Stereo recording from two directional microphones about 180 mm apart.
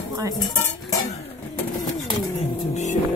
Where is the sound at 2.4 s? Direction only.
40° left (ahead or behind).